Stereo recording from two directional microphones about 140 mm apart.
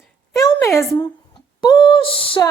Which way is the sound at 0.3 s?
25° left (ahead or behind).